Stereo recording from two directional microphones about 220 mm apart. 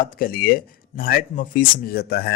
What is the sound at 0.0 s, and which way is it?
A man's voice, 40° left (ahead or behind).